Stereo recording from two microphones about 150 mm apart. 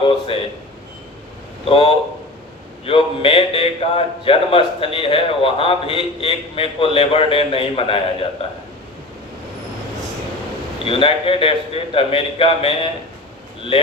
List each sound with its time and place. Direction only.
0.0 s a sound: 35° left (ahead or behind)
1.6 s a man's voice: 40° left (ahead or behind)
10.8 s a man's voice: 35° left (ahead or behind)